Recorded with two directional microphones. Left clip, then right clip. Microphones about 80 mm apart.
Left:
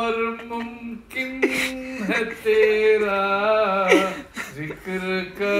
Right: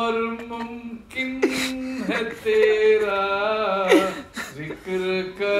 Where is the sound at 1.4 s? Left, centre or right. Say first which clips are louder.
Left 2 dB; right.